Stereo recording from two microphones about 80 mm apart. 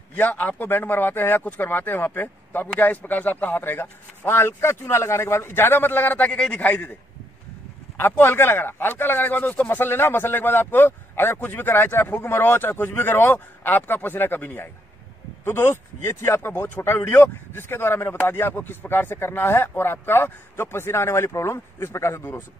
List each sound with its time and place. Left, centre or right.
0.1 s speech: left
8.0 s speech: left